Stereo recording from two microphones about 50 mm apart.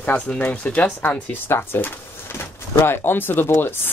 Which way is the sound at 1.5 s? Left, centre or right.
Left.